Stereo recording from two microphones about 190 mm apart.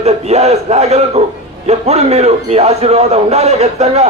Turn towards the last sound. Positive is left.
turn(degrees=-35)  # may be behind; listen again after turning